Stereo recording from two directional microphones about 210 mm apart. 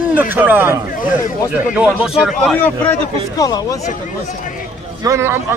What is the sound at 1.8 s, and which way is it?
Speech, 5° right (ahead or behind).